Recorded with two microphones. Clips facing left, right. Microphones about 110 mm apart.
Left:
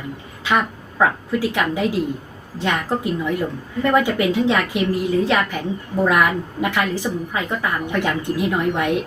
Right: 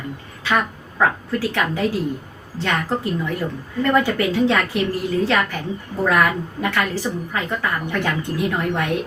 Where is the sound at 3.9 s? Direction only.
15° left (ahead or behind).